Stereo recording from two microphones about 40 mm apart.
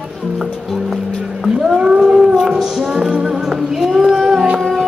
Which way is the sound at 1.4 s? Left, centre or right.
Centre.